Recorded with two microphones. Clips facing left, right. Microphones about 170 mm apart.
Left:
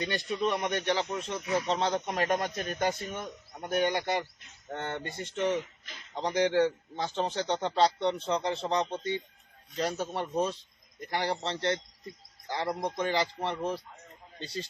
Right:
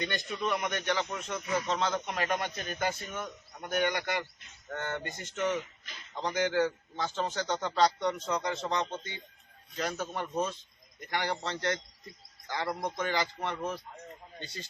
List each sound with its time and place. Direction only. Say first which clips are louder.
0.3 s a man's voice: left 3 dB; 30° left (ahead or behind)